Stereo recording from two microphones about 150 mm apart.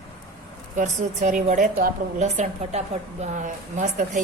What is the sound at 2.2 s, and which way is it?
A woman's voice, 50° right (ahead or behind).